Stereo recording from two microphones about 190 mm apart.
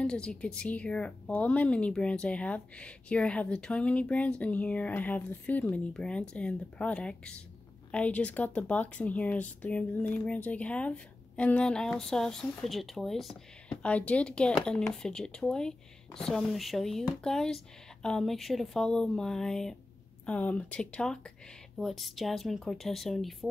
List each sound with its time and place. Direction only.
0.0 s speech: 5° left (ahead or behind)